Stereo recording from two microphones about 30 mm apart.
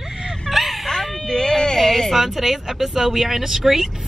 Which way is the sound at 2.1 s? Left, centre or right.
Centre.